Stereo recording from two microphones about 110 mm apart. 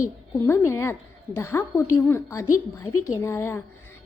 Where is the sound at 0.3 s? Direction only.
20° left (ahead or behind).